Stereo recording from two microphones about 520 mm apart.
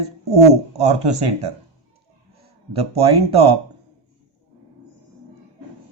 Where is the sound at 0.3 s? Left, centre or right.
Centre.